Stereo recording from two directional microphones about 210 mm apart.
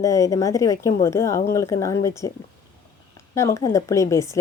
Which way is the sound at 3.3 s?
15° left (ahead or behind).